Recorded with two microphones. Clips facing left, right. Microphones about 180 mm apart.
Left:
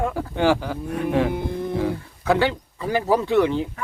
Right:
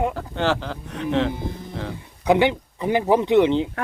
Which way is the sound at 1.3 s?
60° left (ahead or behind).